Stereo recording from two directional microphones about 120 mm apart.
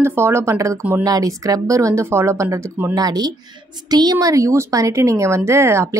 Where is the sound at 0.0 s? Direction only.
20° right (ahead or behind).